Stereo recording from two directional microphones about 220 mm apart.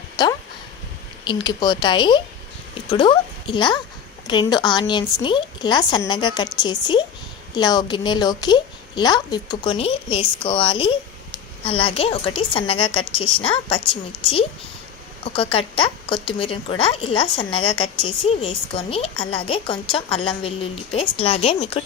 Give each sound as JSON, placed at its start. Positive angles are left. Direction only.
{"t": 0.2, "sound": "a woman's voice", "side_deg": 20}
{"t": 15.2, "sound": "a woman's voice", "side_deg": 25}